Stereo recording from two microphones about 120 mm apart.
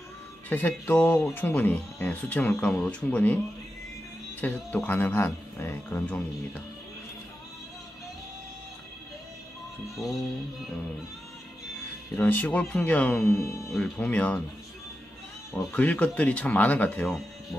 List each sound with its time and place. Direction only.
0.5 s speech: 15° left (ahead or behind)
4.4 s speech: 15° left (ahead or behind)
12.2 s speech: 15° left (ahead or behind)
13.3 s speech: 25° left (ahead or behind)
13.7 s speech: centre (ahead or behind)
15.5 s speech: 10° left (ahead or behind)